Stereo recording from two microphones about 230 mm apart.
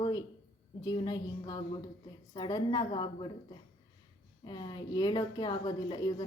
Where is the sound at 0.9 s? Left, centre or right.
Centre.